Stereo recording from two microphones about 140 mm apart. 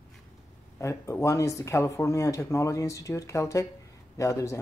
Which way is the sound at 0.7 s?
20° left (ahead or behind).